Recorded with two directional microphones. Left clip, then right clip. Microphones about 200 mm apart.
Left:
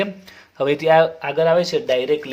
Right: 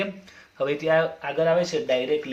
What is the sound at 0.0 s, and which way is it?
Speech, 45° left (ahead or behind).